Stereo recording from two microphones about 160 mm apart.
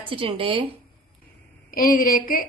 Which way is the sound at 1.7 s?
65° left (ahead or behind).